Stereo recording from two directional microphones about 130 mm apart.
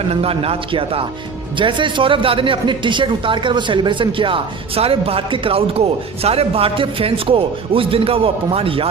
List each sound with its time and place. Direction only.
0.1 s a man's voice: 50° right (ahead or behind)